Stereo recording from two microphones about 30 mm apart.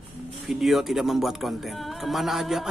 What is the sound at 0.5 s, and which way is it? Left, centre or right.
Speech, centre.